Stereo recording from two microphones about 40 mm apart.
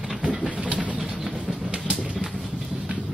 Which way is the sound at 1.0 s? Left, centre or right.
Centre.